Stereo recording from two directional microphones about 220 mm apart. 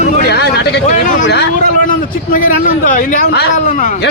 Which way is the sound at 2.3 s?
40° left (ahead or behind).